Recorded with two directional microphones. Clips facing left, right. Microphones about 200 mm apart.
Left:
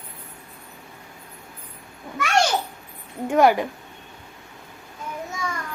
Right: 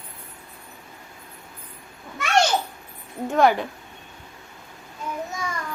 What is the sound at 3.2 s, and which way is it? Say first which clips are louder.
Speech: left 2 dB; 10° left (ahead or behind).